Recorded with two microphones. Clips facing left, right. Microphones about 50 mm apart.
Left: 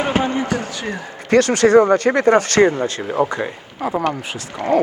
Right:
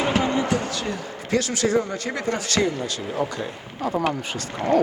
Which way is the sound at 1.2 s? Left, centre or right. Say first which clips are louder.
Left 10 dB; left.